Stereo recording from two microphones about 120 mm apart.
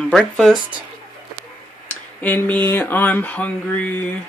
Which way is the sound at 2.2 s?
15° left (ahead or behind).